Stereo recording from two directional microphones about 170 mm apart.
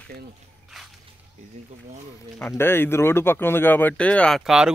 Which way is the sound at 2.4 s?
15° left (ahead or behind).